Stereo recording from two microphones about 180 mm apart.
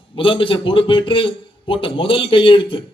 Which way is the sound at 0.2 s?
30° left (ahead or behind).